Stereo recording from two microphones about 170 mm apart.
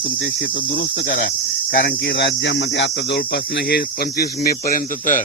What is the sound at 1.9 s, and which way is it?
Cricket, 90° left.